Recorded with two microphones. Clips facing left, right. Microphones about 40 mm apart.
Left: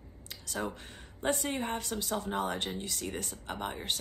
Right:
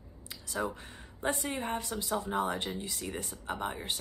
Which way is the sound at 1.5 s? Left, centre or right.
Left.